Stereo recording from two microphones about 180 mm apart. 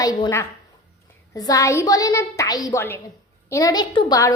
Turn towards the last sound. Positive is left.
turn(degrees=20)  # may be behind; listen again after turning